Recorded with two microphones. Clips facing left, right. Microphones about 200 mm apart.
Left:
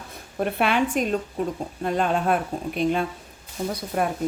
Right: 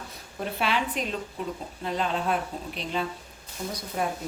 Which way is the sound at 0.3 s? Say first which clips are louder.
Left 6 dB; 55° left (ahead or behind).